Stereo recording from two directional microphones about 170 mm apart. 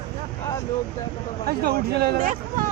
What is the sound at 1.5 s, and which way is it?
Speech, 65° right (ahead or behind).